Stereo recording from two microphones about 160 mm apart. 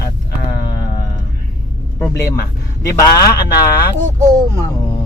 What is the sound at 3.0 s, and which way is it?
Speech, 20° left (ahead or behind).